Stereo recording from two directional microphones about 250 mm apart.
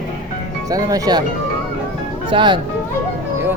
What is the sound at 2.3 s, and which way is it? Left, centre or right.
Speech, centre.